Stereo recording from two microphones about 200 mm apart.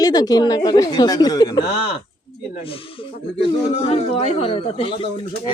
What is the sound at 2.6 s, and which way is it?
Speech, 25° left (ahead or behind).